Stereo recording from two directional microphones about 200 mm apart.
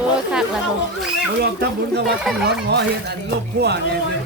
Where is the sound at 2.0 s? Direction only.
Centre (ahead or behind).